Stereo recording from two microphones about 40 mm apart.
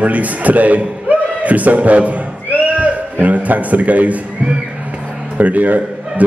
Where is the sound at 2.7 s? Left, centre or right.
Right.